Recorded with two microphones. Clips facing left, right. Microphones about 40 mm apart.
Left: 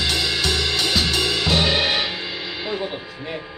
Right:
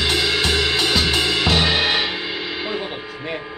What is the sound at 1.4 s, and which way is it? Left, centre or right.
Music, centre.